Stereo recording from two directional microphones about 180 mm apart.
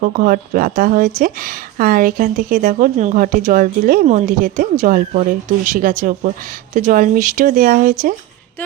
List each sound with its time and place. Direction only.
0.0 s a woman's voice: 50° right (ahead or behind)